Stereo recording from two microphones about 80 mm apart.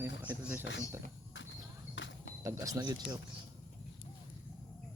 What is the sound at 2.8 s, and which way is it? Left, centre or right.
Speech, right.